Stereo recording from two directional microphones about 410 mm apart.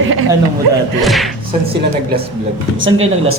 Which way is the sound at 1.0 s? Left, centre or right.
Centre.